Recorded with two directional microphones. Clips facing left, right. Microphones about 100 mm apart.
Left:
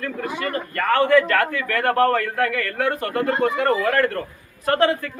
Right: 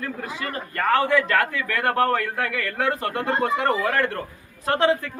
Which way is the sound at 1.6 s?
20° right (ahead or behind).